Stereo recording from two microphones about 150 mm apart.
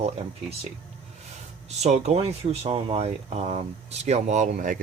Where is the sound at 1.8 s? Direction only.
45° right (ahead or behind).